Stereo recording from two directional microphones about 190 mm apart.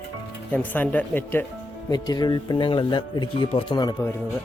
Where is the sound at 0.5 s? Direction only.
10° left (ahead or behind).